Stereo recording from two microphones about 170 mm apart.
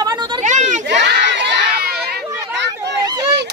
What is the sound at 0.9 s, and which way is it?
Crowd, 90° right.